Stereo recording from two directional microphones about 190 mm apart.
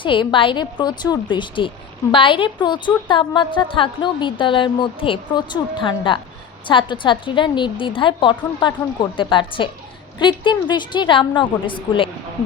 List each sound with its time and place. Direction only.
0.0 s a woman's voice: 25° left (ahead or behind)